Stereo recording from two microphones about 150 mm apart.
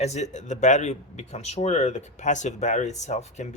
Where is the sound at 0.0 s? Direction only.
50° left (ahead or behind).